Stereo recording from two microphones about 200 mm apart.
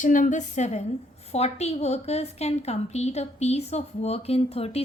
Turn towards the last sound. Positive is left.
turn(degrees=30)  # may be behind; listen again after turning